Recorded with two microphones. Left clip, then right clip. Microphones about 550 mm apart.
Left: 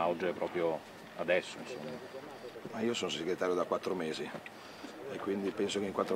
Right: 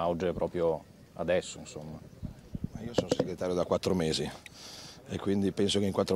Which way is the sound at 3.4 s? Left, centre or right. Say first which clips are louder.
Right 2 dB; right.